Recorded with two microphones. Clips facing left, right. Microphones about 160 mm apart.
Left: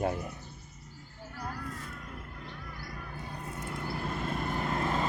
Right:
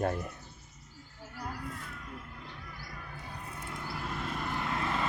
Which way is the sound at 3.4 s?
40° left (ahead or behind).